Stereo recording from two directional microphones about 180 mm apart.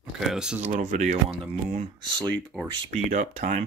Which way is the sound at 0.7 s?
40° right (ahead or behind).